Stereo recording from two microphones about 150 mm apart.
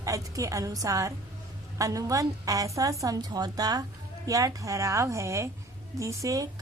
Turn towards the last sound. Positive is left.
turn(degrees=-20)  # may be behind; listen again after turning